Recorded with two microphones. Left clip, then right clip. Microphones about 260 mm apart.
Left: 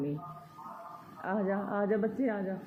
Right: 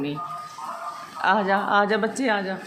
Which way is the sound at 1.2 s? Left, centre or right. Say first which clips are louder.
Right 13 dB; centre.